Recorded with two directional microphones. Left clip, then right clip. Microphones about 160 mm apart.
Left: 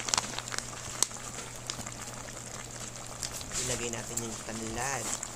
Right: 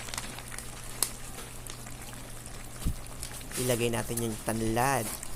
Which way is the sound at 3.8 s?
45° right (ahead or behind).